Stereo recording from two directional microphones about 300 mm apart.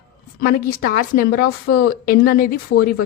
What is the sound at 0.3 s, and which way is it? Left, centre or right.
A woman's voice, left.